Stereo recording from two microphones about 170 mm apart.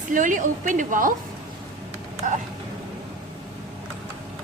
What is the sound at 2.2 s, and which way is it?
Speech, 50° right (ahead or behind).